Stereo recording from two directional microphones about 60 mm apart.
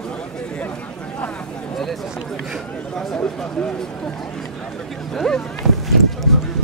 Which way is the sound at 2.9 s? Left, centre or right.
Centre.